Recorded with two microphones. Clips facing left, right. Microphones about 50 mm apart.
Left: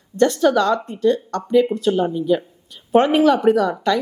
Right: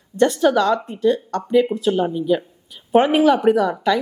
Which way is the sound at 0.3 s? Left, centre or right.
Centre.